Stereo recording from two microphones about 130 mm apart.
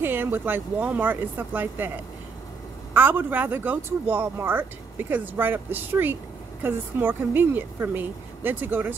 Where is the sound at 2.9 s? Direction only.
15° right (ahead or behind).